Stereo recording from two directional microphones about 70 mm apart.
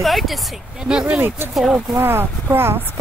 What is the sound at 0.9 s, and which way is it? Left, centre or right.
Speech, centre.